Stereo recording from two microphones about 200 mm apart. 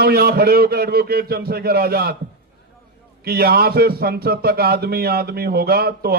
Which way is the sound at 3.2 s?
50° right (ahead or behind).